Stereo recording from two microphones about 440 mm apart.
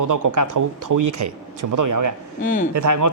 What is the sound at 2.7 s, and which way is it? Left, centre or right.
Speech, right.